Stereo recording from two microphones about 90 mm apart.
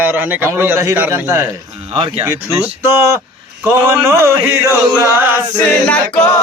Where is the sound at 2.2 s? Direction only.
30° right (ahead or behind).